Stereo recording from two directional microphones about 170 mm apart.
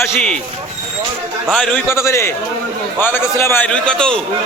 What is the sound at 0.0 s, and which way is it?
Speech, 10° left (ahead or behind).